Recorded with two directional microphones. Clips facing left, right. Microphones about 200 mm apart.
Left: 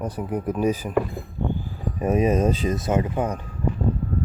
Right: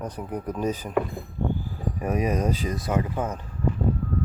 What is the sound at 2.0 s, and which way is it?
Speech, 25° left (ahead or behind).